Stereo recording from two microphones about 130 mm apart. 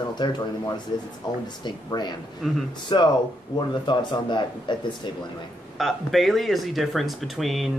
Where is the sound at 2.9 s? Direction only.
40° left (ahead or behind).